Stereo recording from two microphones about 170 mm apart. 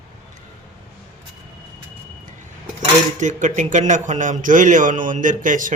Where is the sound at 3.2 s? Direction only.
45° right (ahead or behind).